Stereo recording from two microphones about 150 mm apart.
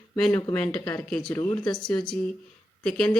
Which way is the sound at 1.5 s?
30° left (ahead or behind).